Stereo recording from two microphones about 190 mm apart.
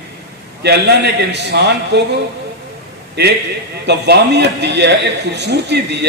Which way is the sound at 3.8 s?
60° right (ahead or behind).